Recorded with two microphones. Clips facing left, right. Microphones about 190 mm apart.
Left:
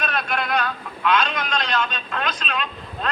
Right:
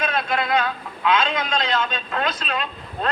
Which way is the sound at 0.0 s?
25° right (ahead or behind).